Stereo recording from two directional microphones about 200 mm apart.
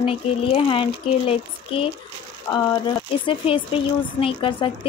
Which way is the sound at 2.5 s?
10° left (ahead or behind).